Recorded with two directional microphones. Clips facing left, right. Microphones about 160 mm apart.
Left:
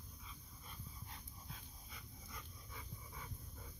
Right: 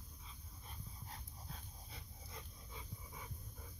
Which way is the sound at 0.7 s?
40° right (ahead or behind).